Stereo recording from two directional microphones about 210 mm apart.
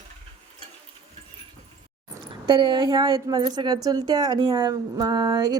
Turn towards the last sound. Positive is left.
turn(degrees=-20)  # may be behind; listen again after turning